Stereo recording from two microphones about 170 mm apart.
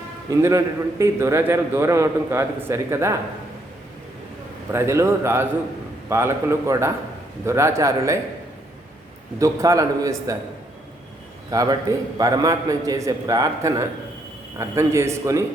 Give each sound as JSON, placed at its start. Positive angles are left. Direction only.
{"t": 0.3, "sound": "a man's voice", "side_deg": -20}
{"t": 4.7, "sound": "a man's voice", "side_deg": -15}
{"t": 9.4, "sound": "a man's voice", "side_deg": -20}
{"t": 11.5, "sound": "a man's voice", "side_deg": -20}